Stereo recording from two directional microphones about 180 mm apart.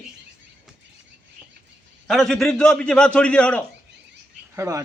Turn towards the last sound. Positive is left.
turn(degrees=-15)  # may be behind; listen again after turning